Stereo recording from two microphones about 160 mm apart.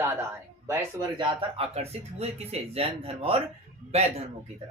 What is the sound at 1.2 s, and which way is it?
Speech, 35° right (ahead or behind).